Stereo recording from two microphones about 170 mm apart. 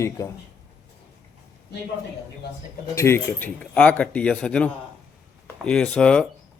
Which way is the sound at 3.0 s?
15° left (ahead or behind).